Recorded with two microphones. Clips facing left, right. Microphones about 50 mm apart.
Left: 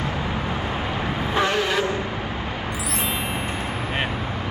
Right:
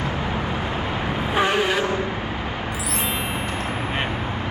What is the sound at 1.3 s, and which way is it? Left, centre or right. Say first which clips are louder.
Vehicle: right 2 dB; centre.